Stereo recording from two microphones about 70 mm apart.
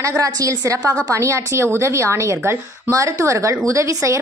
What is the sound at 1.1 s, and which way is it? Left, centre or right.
A woman's voice, right.